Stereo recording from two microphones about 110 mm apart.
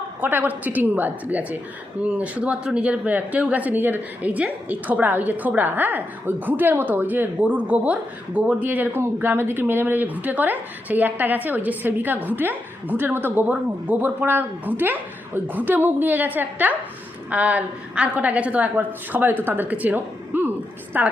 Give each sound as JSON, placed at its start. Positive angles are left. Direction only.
{"t": 0.2, "sound": "speech", "side_deg": -15}